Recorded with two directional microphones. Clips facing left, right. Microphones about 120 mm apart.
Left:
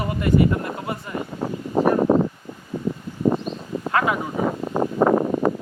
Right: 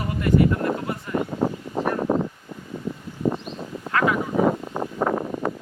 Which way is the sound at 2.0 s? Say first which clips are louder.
Left 3 dB; 55° left (ahead or behind).